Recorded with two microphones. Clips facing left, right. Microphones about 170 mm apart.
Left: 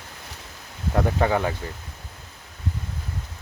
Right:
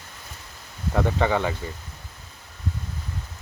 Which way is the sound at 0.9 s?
5° left (ahead or behind).